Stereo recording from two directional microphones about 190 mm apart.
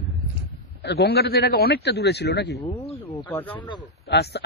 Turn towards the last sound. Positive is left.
turn(degrees=60)  # may be behind; listen again after turning